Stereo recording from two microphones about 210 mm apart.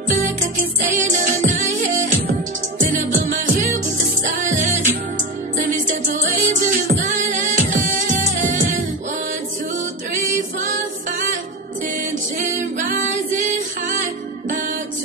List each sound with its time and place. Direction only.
0.7 s music: 35° right (ahead or behind)
10.6 s music: 35° right (ahead or behind)
13.4 s music: 35° right (ahead or behind)